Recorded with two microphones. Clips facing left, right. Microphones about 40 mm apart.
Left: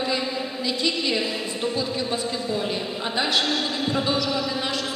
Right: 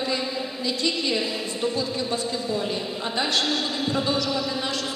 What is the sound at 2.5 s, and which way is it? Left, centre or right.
Speech, left.